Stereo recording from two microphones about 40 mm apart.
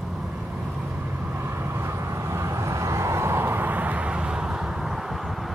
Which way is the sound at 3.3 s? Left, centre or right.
Right.